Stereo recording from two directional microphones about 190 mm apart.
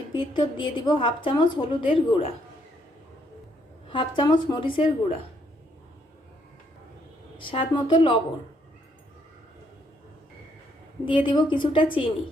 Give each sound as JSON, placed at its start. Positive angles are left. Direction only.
{"t": 0.1, "sound": "a woman's voice", "side_deg": 25}
{"t": 3.9, "sound": "a woman's voice", "side_deg": 25}
{"t": 7.3, "sound": "a woman's voice", "side_deg": 25}
{"t": 11.0, "sound": "a woman's voice", "side_deg": 25}